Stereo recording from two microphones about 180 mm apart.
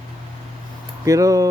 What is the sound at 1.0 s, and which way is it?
Speech, 20° right (ahead or behind).